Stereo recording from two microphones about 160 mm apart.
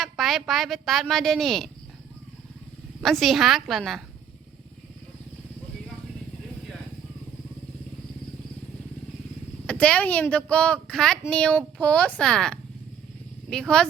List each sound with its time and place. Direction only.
0.0 s a woman's voice: centre (ahead or behind)
3.0 s a woman's voice: centre (ahead or behind)
9.6 s a woman's voice: 5° left (ahead or behind)